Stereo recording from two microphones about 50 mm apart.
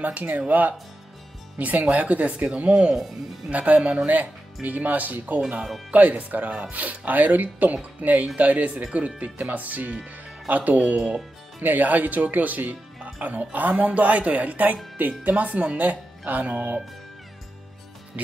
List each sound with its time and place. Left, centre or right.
0.0 s speech: right
18.1 s speech: right